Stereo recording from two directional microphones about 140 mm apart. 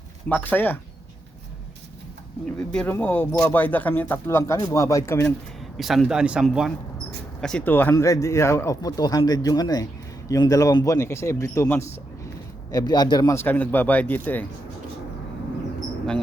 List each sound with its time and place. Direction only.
0.3 s speech: 15° left (ahead or behind)
2.7 s speech: 15° left (ahead or behind)
5.7 s speech: centre (ahead or behind)
7.4 s speech: 10° left (ahead or behind); by 13.3 s 30° left (ahead or behind)
13.3 s speech: 15° left (ahead or behind)